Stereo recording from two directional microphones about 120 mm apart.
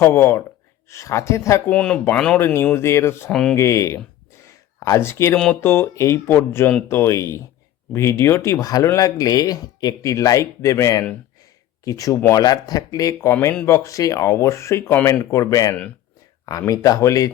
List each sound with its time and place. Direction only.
0.0 s speech: 20° left (ahead or behind)
1.7 s speech: 10° left (ahead or behind)
2.7 s speech: 20° left (ahead or behind)
4.4 s a sound: 25° left (ahead or behind)
5.5 s speech: 20° left (ahead or behind)
13.3 s speech: 15° left (ahead or behind)